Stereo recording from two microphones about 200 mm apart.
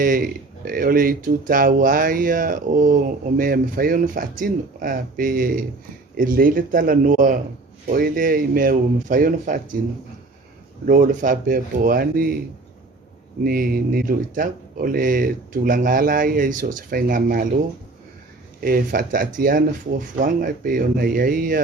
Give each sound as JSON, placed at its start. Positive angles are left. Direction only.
{"t": 0.0, "sound": "speech", "side_deg": -45}
{"t": 10.8, "sound": "speech", "side_deg": -40}
{"t": 13.4, "sound": "speech", "side_deg": -45}
{"t": 18.6, "sound": "speech", "side_deg": -45}